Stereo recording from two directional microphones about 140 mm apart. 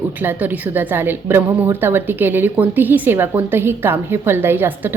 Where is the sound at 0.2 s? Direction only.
10° right (ahead or behind).